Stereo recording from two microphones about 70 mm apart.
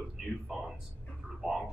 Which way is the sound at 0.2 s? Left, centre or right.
Centre.